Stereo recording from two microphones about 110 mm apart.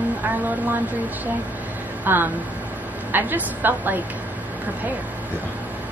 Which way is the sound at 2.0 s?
20° right (ahead or behind).